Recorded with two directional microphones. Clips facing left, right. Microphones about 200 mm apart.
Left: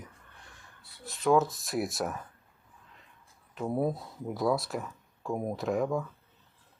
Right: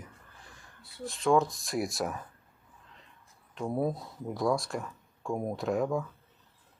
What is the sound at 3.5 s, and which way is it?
Speech, centre (ahead or behind).